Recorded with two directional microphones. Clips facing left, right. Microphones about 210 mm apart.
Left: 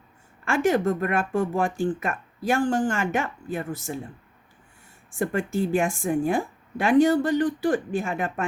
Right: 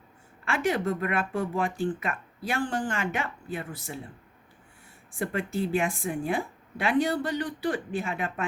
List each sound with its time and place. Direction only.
0.4 s speech: 45° left (ahead or behind)
5.1 s speech: 45° left (ahead or behind)